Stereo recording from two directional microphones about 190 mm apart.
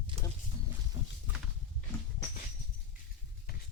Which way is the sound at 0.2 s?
35° right (ahead or behind).